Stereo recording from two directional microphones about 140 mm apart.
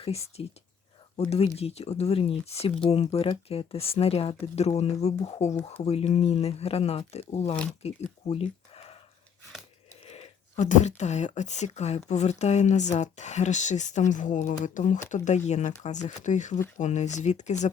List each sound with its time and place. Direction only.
0.0 s speech: 45° left (ahead or behind)
7.8 s a sound: 50° left (ahead or behind)
10.1 s speech: 55° left (ahead or behind)